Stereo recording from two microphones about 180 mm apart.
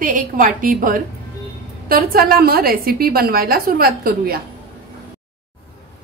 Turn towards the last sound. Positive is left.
turn(degrees=-55)  # may be behind; listen again after turning